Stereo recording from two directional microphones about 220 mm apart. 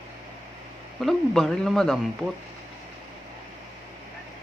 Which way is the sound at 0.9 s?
Centre (ahead or behind).